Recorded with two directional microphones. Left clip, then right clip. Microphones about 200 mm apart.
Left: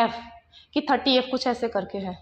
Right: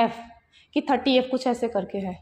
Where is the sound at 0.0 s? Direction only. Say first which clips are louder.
Even; 25° right (ahead or behind).